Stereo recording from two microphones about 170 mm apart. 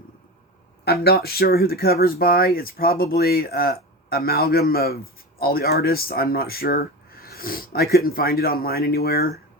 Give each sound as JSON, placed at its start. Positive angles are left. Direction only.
{"t": 0.9, "sound": "speech", "side_deg": 65}